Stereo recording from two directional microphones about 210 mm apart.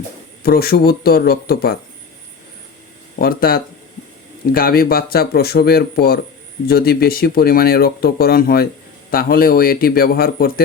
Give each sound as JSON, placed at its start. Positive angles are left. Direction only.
{"t": 0.4, "sound": "speech", "side_deg": 45}
{"t": 3.2, "sound": "speech", "side_deg": 45}